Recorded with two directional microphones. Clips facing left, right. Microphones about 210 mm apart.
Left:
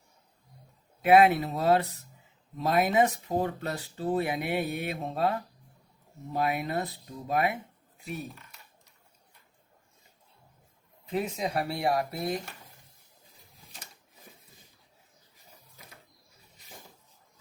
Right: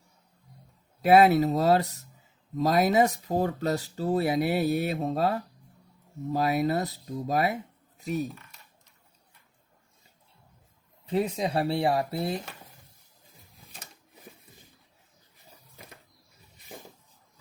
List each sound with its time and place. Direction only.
1.0 s speech: 40° right (ahead or behind)
11.0 s speech: 30° right (ahead or behind)